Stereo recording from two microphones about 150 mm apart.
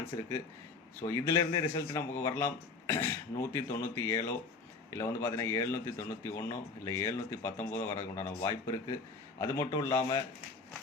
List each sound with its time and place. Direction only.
1.0 s a man's voice: 20° left (ahead or behind)